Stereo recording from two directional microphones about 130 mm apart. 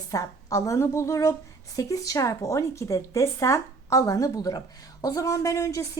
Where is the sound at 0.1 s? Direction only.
25° left (ahead or behind).